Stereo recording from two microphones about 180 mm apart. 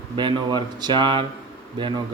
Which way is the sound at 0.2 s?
25° right (ahead or behind).